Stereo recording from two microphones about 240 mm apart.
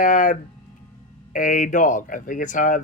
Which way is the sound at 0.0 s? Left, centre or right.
Left.